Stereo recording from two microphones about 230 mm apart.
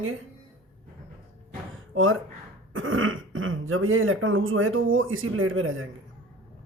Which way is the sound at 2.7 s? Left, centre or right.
Right.